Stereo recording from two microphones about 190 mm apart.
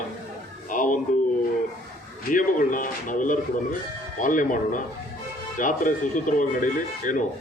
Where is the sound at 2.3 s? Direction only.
45° left (ahead or behind).